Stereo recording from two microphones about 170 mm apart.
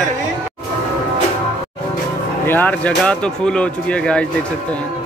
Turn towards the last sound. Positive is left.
turn(degrees=5)  # may be behind; listen again after turning